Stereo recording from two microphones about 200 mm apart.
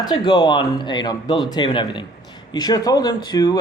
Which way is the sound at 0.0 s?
20° left (ahead or behind).